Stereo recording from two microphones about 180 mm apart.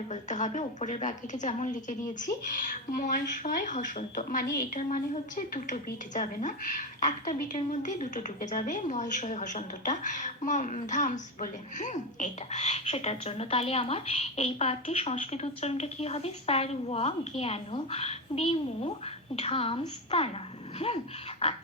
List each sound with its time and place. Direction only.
0.1 s a woman's voice: 40° left (ahead or behind)
5.5 s a woman's voice: 45° left (ahead or behind)